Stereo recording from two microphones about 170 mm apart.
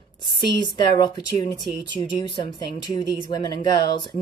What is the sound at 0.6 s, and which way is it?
Speech, 25° left (ahead or behind).